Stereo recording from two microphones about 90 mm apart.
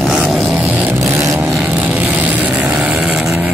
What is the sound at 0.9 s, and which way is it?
Vehicle, 30° right (ahead or behind).